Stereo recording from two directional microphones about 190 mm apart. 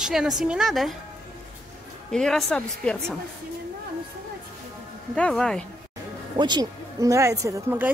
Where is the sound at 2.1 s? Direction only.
5° left (ahead or behind).